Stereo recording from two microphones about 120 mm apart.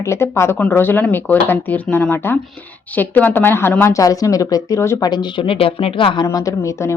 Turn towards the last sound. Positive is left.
turn(degrees=25)  # may be behind; listen again after turning